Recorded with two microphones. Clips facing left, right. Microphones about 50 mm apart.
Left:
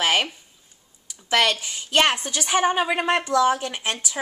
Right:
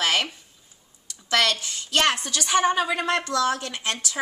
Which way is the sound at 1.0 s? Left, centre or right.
Centre.